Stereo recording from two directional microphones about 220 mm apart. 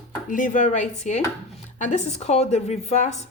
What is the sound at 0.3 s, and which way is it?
A woman's voice, 35° left (ahead or behind).